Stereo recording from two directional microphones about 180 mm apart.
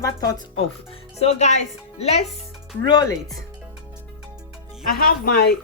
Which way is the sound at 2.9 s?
20° left (ahead or behind).